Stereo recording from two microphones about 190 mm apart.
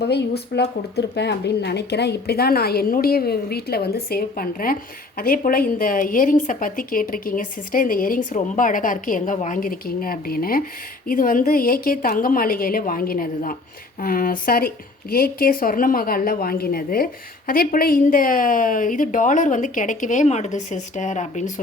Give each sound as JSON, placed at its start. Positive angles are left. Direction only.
{"t": 0.0, "sound": "speech", "side_deg": 60}